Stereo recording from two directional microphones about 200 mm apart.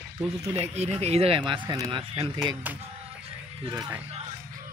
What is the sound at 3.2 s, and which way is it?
Music, 20° right (ahead or behind).